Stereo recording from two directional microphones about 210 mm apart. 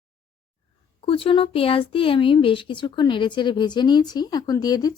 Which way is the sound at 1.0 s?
25° left (ahead or behind).